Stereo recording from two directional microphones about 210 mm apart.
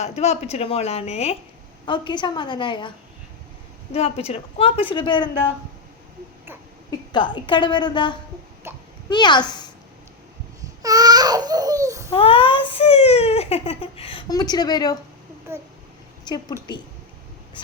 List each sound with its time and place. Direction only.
0.0 s a child's voice: 30° left (ahead or behind)
3.9 s a child's voice: 30° left (ahead or behind)
7.1 s a child's voice: 20° left (ahead or behind)
8.7 s a sound: 10° right (ahead or behind)
9.0 s a child's voice: 20° left (ahead or behind)
10.8 s baby cry: 20° right (ahead or behind)
12.1 s a child's voice: 25° left (ahead or behind)
16.2 s a woman's voice: 20° left (ahead or behind)